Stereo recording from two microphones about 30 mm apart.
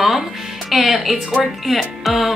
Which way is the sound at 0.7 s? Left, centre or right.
Centre.